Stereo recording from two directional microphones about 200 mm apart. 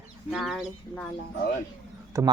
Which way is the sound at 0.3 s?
Centre (ahead or behind).